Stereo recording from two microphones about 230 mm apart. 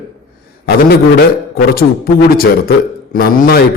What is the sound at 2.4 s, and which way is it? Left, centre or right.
A man's voice, left.